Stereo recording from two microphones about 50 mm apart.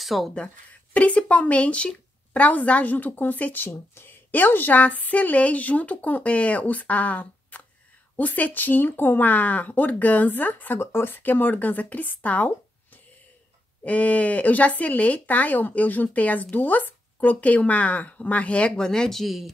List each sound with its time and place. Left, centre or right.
0.0 s speech: centre
0.9 s speech: left
3.6 s speech: left
10.8 s speech: left
18.7 s speech: centre